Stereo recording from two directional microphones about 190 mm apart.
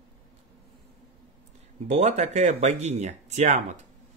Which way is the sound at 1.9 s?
40° right (ahead or behind).